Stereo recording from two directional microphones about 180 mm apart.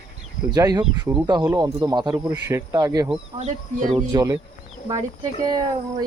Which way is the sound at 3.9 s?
20° right (ahead or behind).